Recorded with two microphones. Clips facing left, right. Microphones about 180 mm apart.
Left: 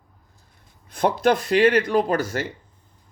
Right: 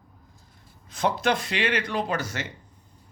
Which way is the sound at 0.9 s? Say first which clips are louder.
Left 5 dB; 50° left (ahead or behind).